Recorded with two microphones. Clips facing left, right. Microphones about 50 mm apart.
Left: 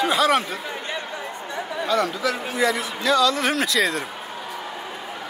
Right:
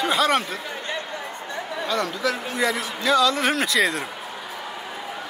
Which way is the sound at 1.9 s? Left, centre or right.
Centre.